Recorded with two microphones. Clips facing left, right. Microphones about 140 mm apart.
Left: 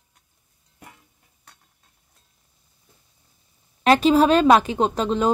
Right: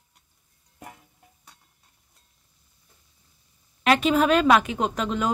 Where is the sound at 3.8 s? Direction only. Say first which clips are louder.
Left 4 dB; 35° left (ahead or behind).